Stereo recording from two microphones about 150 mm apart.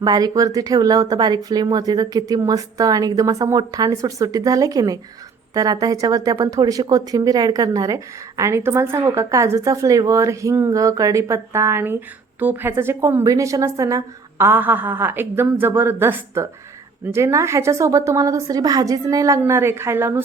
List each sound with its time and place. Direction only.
0.0 s a woman's voice: 25° right (ahead or behind)